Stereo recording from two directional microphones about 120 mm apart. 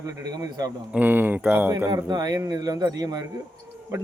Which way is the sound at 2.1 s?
35° right (ahead or behind).